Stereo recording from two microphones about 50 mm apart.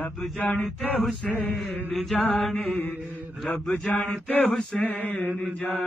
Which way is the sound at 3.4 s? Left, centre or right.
Centre.